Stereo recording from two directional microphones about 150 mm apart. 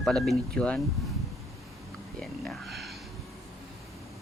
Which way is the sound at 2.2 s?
Centre (ahead or behind).